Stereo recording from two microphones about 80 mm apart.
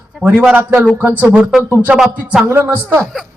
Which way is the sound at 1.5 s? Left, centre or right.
Centre.